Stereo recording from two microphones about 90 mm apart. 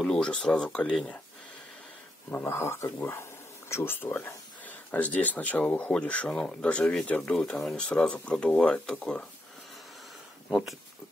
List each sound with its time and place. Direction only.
0.0 s speech: 10° left (ahead or behind)
2.3 s speech: 25° left (ahead or behind); by 9.2 s 10° left (ahead or behind)
10.5 s speech: 5° right (ahead or behind)